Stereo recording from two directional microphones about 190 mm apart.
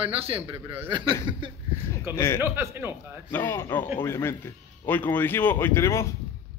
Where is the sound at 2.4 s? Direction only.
10° right (ahead or behind).